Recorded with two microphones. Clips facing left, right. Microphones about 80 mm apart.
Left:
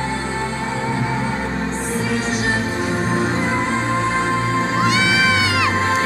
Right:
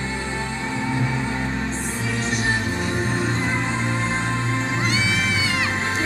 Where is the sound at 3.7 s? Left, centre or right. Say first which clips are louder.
Left 5 dB; left.